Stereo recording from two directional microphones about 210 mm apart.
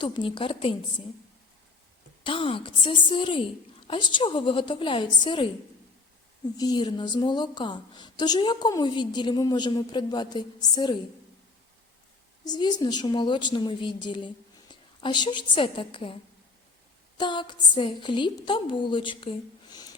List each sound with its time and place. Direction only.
0.0 s a woman's voice: 25° left (ahead or behind)
2.2 s a woman's voice: 25° left (ahead or behind)
6.6 s a woman's voice: 20° left (ahead or behind)
12.5 s a woman's voice: 20° left (ahead or behind)
17.2 s a woman's voice: 20° left (ahead or behind)